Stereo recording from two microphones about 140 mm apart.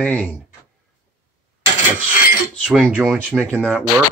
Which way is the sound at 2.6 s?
10° right (ahead or behind).